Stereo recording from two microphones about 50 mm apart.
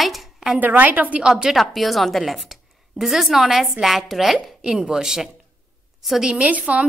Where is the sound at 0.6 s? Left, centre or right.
Right.